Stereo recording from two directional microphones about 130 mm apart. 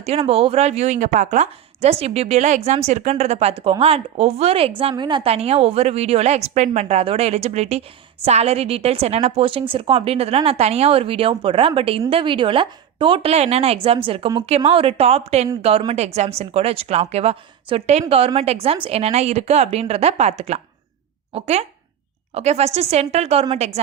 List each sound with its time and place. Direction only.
0.2 s a woman's voice: 45° right (ahead or behind)
3.6 s a woman's voice: 45° right (ahead or behind)